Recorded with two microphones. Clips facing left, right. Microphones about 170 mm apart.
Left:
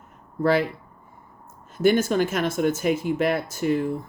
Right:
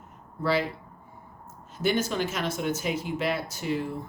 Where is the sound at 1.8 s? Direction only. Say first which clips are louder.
Left 7 dB; 50° left (ahead or behind).